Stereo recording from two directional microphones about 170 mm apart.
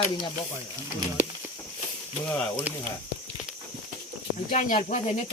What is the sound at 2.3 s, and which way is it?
Speech, 10° left (ahead or behind).